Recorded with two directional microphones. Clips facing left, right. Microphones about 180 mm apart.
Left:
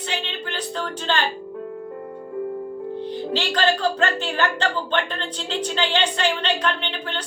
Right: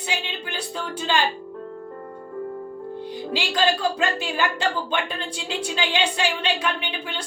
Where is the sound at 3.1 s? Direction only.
10° right (ahead or behind).